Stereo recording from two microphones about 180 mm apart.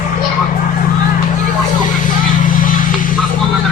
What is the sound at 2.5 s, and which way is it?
Vehicle, 50° left (ahead or behind).